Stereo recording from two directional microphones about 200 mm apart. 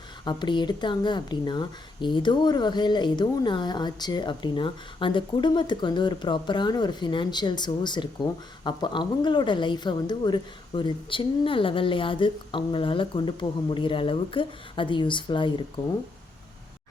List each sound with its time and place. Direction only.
0.3 s speech: 20° left (ahead or behind)